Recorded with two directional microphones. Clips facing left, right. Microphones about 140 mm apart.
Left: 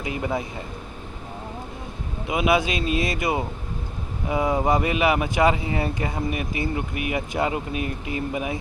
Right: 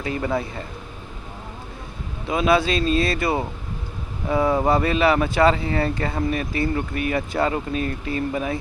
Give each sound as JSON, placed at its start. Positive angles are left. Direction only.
{"t": 0.0, "sound": "speech", "side_deg": 15}
{"t": 2.2, "sound": "speech", "side_deg": 15}